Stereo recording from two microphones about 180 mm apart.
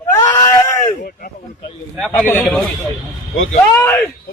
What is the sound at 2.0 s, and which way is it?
Speech, 5° left (ahead or behind).